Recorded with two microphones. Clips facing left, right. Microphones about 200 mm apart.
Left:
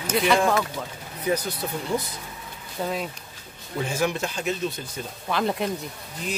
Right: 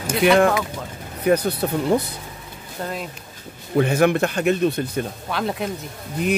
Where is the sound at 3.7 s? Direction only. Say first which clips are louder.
Right 9 dB; 60° right (ahead or behind).